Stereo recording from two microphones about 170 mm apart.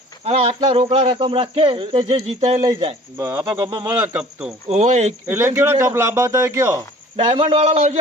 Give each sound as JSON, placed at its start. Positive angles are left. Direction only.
{"t": 0.3, "sound": "a man's voice", "side_deg": -35}
{"t": 3.2, "sound": "speech", "side_deg": -15}
{"t": 4.7, "sound": "a man's voice", "side_deg": -40}
{"t": 5.3, "sound": "speech", "side_deg": -15}
{"t": 7.3, "sound": "a man's voice", "side_deg": -35}